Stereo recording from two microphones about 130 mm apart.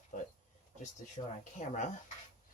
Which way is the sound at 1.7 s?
70° left (ahead or behind).